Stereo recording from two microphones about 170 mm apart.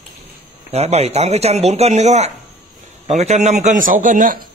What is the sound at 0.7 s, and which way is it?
A man's voice, 40° right (ahead or behind).